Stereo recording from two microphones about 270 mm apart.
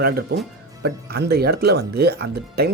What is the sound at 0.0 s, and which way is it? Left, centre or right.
Speech, right.